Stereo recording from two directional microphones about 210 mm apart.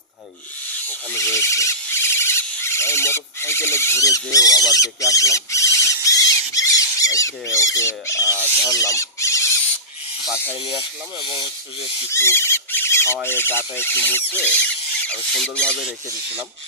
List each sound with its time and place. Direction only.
1.1 s squeal: 15° left (ahead or behind)
10.7 s speech: 25° left (ahead or behind)
12.1 s speech: 10° left (ahead or behind)